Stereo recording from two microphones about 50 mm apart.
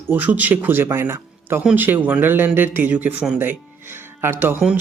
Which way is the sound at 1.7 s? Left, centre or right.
Right.